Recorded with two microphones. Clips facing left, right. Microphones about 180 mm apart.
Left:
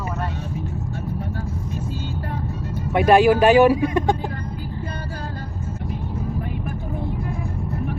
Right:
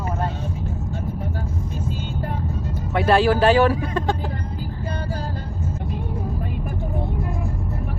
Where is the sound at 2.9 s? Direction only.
15° left (ahead or behind).